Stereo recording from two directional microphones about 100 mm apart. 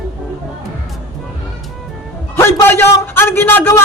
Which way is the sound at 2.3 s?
20° left (ahead or behind).